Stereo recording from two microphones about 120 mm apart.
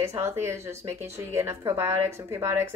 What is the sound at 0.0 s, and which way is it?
A woman's voice, 25° right (ahead or behind).